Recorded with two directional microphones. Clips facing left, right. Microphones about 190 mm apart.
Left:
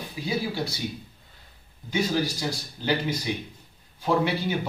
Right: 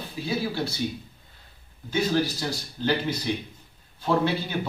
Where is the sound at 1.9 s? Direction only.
10° left (ahead or behind).